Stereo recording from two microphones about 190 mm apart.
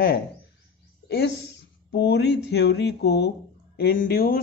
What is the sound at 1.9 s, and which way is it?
Speech, 60° left (ahead or behind).